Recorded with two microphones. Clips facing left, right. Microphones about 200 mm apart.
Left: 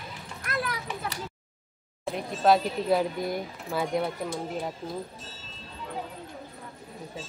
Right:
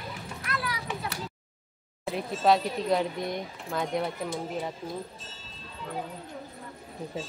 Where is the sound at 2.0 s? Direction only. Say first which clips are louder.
Left 1 dB; centre (ahead or behind).